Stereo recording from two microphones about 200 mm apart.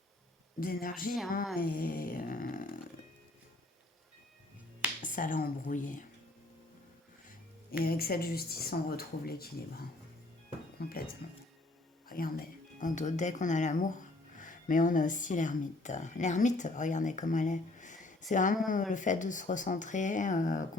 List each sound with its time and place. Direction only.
0.6 s speech: 45° left (ahead or behind)
5.0 s speech: 40° left (ahead or behind)
7.3 s speech: 50° left (ahead or behind)
10.8 s speech: 50° left (ahead or behind)